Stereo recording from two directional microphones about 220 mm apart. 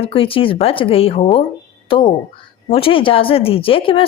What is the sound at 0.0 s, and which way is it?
A woman's voice, 25° left (ahead or behind).